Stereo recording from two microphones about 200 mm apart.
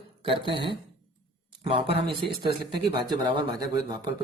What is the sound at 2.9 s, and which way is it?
Speech, 25° right (ahead or behind).